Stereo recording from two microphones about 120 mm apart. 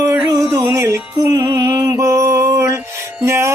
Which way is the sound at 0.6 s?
20° right (ahead or behind).